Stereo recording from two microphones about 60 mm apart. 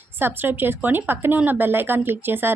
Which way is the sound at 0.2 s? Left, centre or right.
Right.